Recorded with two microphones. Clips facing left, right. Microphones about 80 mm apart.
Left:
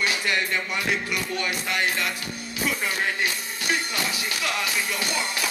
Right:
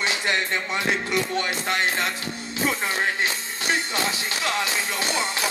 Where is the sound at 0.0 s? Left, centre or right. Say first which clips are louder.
Right 1 dB; right.